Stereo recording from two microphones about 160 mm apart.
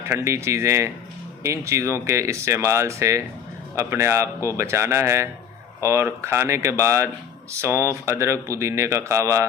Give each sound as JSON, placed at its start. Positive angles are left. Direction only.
{"t": 0.0, "sound": "speech", "side_deg": -15}